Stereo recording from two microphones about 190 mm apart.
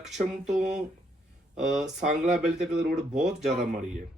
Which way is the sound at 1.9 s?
35° right (ahead or behind).